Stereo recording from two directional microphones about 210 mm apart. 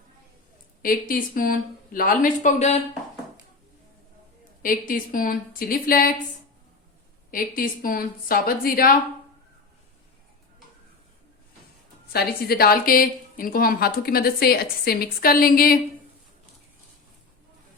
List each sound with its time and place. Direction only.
0.8 s speech: 45° left (ahead or behind)
4.6 s a woman's voice: 40° left (ahead or behind)
7.3 s a woman's voice: 40° left (ahead or behind)
12.1 s a woman's voice: 45° left (ahead or behind)